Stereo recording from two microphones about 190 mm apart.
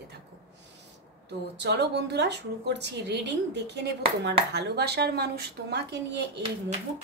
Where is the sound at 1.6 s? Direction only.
60° right (ahead or behind).